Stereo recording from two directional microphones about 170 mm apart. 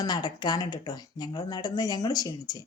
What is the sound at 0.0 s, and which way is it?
Speech, 25° left (ahead or behind).